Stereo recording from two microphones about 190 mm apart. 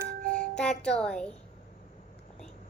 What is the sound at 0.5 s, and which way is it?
Speech, 5° left (ahead or behind).